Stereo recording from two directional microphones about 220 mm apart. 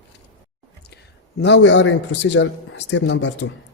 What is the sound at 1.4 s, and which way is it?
A man's voice, 55° left (ahead or behind).